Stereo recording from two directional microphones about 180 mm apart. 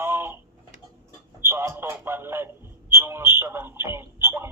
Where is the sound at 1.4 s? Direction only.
15° right (ahead or behind).